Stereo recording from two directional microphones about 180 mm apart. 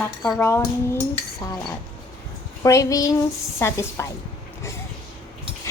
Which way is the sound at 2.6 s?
20° left (ahead or behind).